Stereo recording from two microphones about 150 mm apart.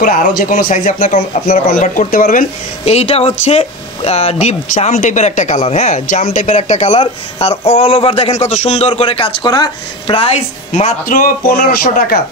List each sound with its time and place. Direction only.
0.0 s speech: 65° left (ahead or behind); by 1.2 s 50° left (ahead or behind)
1.4 s speech: 70° left (ahead or behind)
2.8 s a man's voice: 45° left (ahead or behind)
11.1 s speech: 65° left (ahead or behind); by 12.2 s 85° left